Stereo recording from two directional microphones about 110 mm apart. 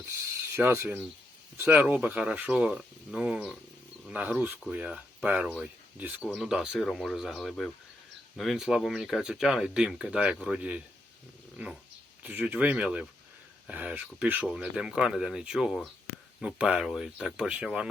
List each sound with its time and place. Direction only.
0.5 s speech: 20° right (ahead or behind)
1.7 s speech: 10° right (ahead or behind)
6.2 s speech: 5° right (ahead or behind)
6.8 s speech: 5° left (ahead or behind); by 14.4 s 15° right (ahead or behind)
14.4 s speech: 5° right (ahead or behind)